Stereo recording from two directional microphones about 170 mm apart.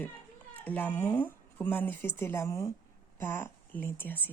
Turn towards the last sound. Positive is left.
turn(degrees=10)  # may be behind; listen again after turning